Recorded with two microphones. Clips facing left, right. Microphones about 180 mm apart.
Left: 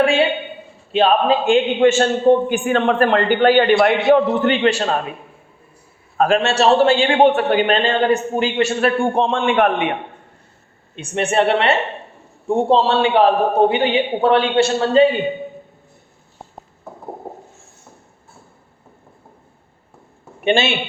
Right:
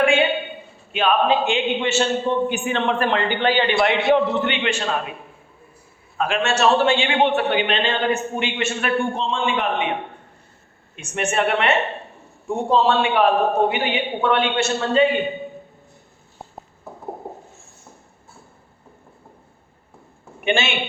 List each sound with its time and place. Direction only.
0.0 s a sound: 35° left (ahead or behind)
0.9 s a man's voice: 35° left (ahead or behind)
6.1 s a man's voice: 40° left (ahead or behind)
9.1 s a man's voice: 60° left (ahead or behind)
10.9 s a man's voice: 30° left (ahead or behind)
20.4 s a man's voice: 35° left (ahead or behind)